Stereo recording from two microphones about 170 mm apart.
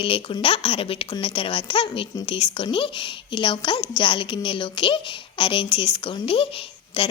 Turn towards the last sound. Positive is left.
turn(degrees=30)  # may be behind; listen again after turning